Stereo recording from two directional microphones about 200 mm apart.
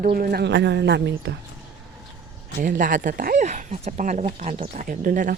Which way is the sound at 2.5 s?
40° right (ahead or behind).